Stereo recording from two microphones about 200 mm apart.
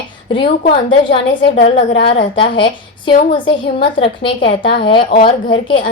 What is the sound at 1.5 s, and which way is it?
Speech, 65° left (ahead or behind).